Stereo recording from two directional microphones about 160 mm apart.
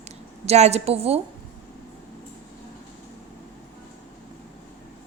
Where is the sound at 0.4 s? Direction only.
45° right (ahead or behind).